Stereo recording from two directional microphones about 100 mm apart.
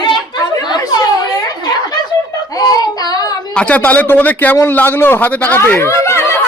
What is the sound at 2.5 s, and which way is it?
Child singing, 40° left (ahead or behind).